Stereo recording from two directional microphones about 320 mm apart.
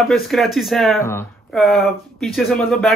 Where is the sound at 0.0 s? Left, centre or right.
Centre.